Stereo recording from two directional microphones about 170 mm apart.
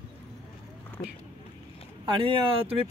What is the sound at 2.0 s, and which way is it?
Speech, 30° right (ahead or behind).